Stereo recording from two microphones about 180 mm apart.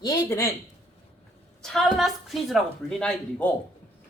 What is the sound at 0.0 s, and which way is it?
Speech, 20° left (ahead or behind).